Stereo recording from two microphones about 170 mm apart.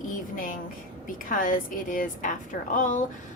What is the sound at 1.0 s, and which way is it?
A woman's voice, 50° left (ahead or behind).